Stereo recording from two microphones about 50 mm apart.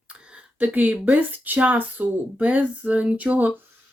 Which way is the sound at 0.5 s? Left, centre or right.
Right.